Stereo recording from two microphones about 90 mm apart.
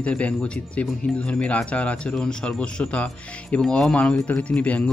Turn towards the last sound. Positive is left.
turn(degrees=15)  # may be behind; listen again after turning